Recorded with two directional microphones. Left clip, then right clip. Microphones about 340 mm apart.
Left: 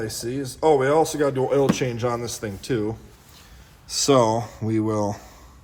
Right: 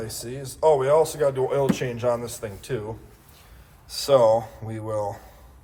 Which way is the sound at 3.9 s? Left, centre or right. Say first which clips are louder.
Right 1 dB; left.